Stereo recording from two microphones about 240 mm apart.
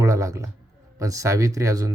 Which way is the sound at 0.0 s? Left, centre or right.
Centre.